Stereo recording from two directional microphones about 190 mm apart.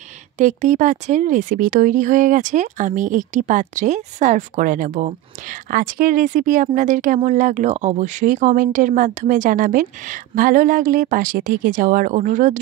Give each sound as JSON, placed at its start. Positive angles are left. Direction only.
{"t": 0.4, "sound": "speech", "side_deg": -40}